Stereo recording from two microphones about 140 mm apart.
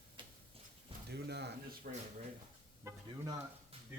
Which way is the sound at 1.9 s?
90° right.